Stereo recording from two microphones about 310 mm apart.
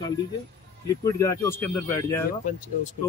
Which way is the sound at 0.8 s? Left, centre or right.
Centre.